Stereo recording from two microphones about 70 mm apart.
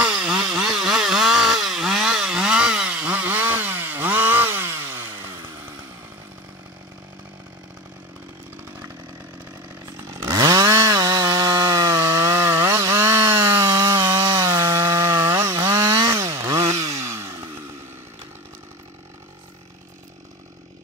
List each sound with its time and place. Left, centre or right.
0.0 s chainsaw: centre; by 5.6 s right
9.9 s chainsaw: right
10.3 s chainsaw: right
17.2 s chainsaw: right